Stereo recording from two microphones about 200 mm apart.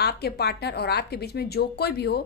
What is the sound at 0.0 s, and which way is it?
A woman's voice, 55° left (ahead or behind).